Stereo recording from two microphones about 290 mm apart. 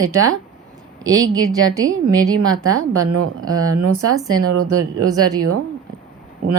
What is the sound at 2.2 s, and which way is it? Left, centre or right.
Speech, right.